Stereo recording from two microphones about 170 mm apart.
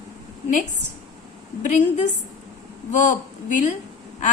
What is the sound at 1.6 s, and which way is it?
A woman's voice, 45° left (ahead or behind).